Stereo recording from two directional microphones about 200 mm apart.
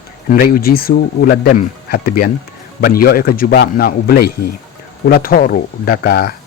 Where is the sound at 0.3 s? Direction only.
45° left (ahead or behind).